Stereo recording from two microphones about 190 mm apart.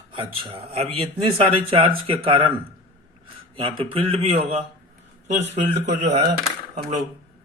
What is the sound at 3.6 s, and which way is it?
Speech, 30° right (ahead or behind).